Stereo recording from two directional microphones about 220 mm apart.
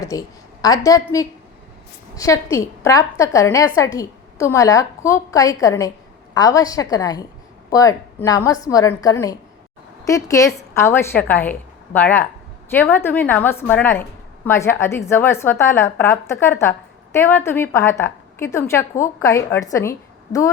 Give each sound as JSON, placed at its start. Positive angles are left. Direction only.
{"t": 0.0, "sound": "a woman's voice", "side_deg": 15}